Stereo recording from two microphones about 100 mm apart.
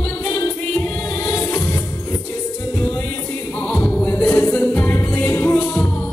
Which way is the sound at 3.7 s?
15° left (ahead or behind).